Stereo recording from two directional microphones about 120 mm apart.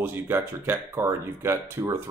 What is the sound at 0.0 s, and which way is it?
Speech, 15° right (ahead or behind).